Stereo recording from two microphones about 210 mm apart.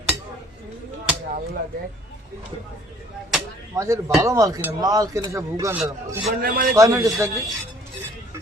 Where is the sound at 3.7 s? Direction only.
15° right (ahead or behind).